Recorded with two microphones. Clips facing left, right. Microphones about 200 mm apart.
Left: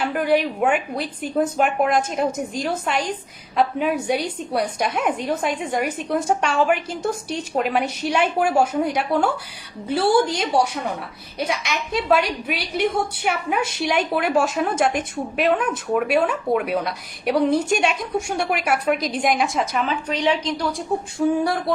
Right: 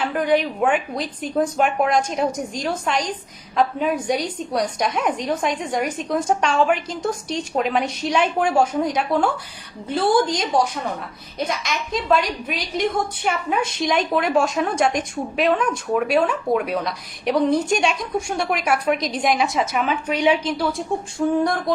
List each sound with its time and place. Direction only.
0.0 s a woman's voice: 5° left (ahead or behind)